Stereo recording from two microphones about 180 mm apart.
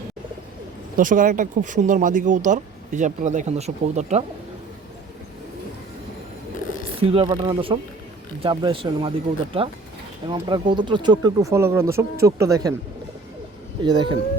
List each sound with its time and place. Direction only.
0.9 s speech: 45° right (ahead or behind)
7.0 s speech: 30° right (ahead or behind)
13.8 s speech: 25° right (ahead or behind)